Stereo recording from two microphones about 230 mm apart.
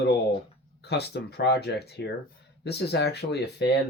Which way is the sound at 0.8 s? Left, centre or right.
Left.